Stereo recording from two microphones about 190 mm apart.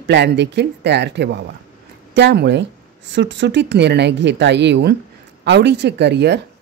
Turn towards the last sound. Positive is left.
turn(degrees=-65)  # may be behind; listen again after turning